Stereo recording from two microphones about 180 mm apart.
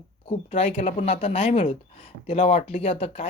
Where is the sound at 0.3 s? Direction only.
30° left (ahead or behind).